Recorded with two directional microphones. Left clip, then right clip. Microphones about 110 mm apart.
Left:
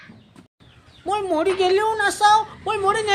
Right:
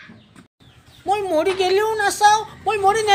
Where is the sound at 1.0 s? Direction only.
25° left (ahead or behind).